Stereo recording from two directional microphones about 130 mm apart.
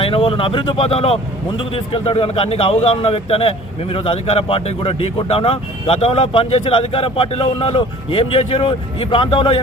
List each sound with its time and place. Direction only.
0.0 s a man's voice: 40° left (ahead or behind)